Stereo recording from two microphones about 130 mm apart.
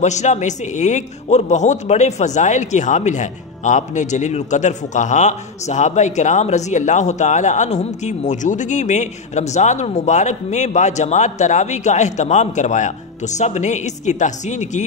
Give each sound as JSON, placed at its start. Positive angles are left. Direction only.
{"t": 0.0, "sound": "a man's voice", "side_deg": 65}